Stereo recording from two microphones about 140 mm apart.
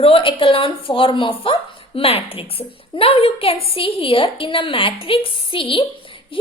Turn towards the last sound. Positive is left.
turn(degrees=40)  # may be behind; listen again after turning